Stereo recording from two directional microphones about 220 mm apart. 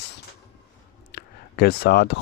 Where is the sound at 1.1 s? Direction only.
45° left (ahead or behind).